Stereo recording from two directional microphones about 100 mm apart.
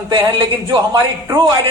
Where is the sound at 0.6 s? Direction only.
40° right (ahead or behind).